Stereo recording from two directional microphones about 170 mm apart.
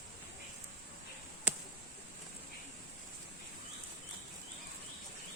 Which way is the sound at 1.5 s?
5° right (ahead or behind).